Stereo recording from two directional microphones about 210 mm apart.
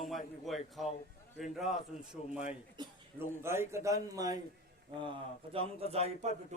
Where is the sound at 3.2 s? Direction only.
10° right (ahead or behind).